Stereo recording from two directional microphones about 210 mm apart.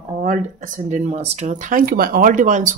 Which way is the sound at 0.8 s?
30° right (ahead or behind).